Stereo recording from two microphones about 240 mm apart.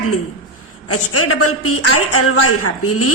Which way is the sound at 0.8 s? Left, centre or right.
Left.